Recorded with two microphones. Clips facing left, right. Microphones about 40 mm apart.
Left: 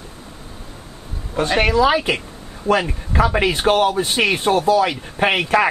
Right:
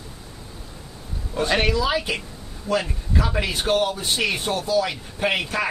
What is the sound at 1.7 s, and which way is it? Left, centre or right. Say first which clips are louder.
Speech: left 7 dB; left.